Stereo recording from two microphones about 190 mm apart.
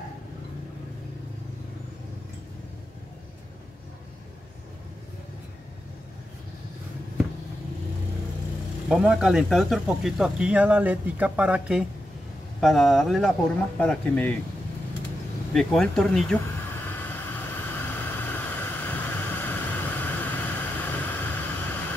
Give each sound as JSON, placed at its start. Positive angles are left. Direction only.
{"t": 8.8, "sound": "speech", "side_deg": -5}
{"t": 15.5, "sound": "speech", "side_deg": 5}
{"t": 16.8, "sound": "vehicle", "side_deg": 10}